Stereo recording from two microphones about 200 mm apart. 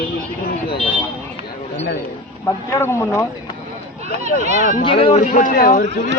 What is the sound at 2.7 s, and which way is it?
Speech, 15° left (ahead or behind).